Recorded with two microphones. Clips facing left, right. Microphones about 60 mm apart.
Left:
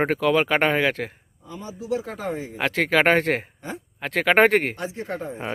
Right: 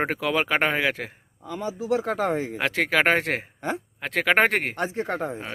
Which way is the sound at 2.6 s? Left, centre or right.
Centre.